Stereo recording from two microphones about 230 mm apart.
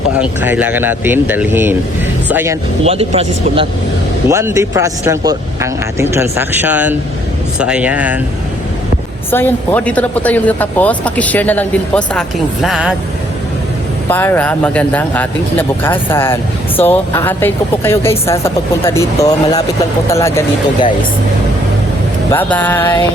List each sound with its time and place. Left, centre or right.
0.2 s speech: centre
2.8 s a man's voice: right
4.3 s speech: centre
9.3 s speech: centre
14.1 s speech: centre
22.3 s speech: centre